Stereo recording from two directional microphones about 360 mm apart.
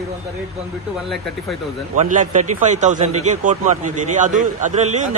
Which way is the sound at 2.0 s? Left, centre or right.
Right.